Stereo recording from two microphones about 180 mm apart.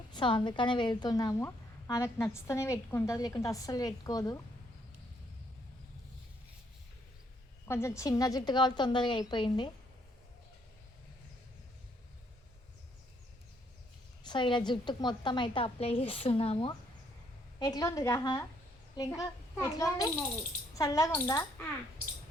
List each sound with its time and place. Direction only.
0.1 s a woman's voice: 25° left (ahead or behind)
7.7 s a woman's voice: 15° left (ahead or behind)
14.3 s a woman's voice: 25° left (ahead or behind)
17.6 s a woman's voice: 20° left (ahead or behind)